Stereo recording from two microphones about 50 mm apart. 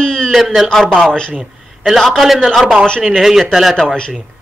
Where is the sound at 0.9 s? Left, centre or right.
Centre.